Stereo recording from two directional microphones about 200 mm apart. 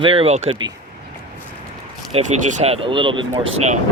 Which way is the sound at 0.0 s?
25° right (ahead or behind).